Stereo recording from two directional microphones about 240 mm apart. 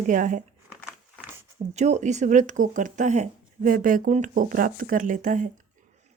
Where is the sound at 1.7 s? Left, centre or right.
Right.